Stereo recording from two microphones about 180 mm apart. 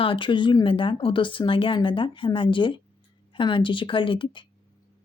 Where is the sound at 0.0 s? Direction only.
30° left (ahead or behind).